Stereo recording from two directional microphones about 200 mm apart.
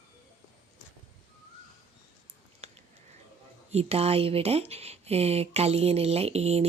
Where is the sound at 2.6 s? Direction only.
35° right (ahead or behind).